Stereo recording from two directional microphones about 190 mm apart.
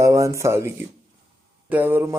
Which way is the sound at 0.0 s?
15° right (ahead or behind).